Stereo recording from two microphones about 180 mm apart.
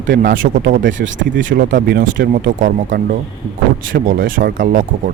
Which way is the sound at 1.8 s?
80° right.